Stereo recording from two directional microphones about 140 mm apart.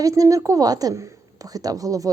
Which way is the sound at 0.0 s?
25° right (ahead or behind).